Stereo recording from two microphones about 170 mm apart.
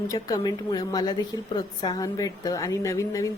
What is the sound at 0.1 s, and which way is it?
A woman's voice, 20° left (ahead or behind).